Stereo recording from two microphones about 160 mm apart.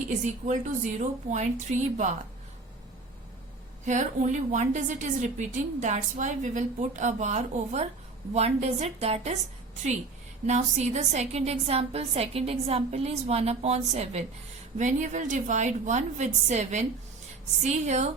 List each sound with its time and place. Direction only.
0.3 s a woman's voice: 50° right (ahead or behind)
3.8 s a woman's voice: 50° right (ahead or behind)
10.4 s a woman's voice: 45° right (ahead or behind)